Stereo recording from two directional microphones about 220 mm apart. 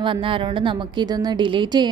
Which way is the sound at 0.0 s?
25° right (ahead or behind).